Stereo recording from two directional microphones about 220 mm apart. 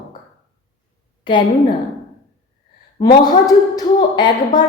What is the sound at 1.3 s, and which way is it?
Speech, 20° left (ahead or behind).